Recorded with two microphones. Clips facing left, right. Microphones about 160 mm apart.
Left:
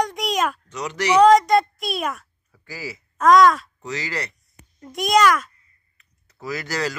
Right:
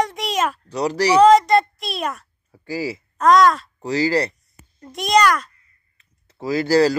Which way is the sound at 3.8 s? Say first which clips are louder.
Right 10 dB; 35° right (ahead or behind).